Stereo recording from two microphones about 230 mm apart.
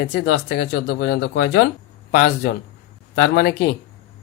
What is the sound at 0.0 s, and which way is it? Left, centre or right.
Speech, left.